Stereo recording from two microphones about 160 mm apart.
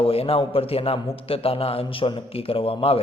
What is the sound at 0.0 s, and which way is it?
A man's voice, 35° left (ahead or behind).